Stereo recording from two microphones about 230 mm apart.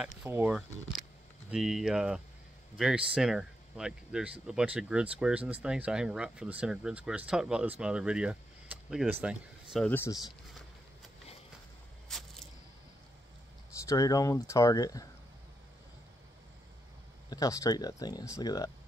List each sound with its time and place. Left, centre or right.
0.2 s speech: centre
9.8 s speech: centre
12.1 s squish: centre
13.8 s speech: centre
17.3 s speech: centre